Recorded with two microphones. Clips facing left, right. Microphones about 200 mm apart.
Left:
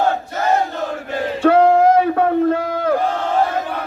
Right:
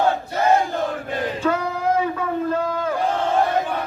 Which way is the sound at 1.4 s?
70° left (ahead or behind).